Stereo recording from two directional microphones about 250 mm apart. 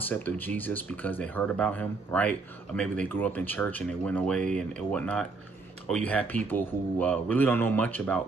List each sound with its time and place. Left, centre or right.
0.1 s speech: centre